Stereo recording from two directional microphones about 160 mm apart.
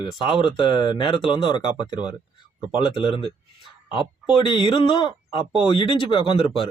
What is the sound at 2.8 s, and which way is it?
Speech, 35° left (ahead or behind).